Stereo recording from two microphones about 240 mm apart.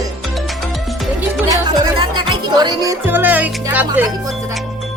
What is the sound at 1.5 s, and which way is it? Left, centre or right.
Music, centre.